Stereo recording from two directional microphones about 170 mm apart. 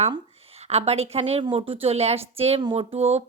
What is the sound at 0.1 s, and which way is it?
Speech, 35° right (ahead or behind).